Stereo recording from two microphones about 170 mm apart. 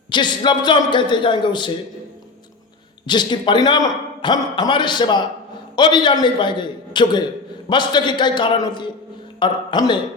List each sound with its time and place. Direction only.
0.1 s a man's voice: 25° left (ahead or behind)
3.1 s a man's voice: 25° left (ahead or behind)